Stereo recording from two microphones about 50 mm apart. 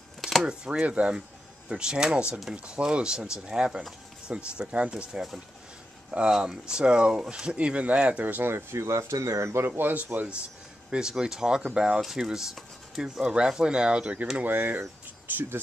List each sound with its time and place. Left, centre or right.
0.2 s a sound: centre
0.5 s speech: centre
0.8 s speech: right
6.3 s speech: centre
8.2 s speech: right
8.5 s speech: right
9.7 s speech: right
10.9 s speech: centre
14.4 s speech: right